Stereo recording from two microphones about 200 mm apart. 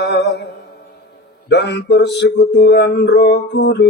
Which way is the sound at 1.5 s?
60° left (ahead or behind).